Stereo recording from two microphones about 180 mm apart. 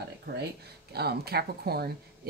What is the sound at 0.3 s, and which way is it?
Speech, 55° right (ahead or behind).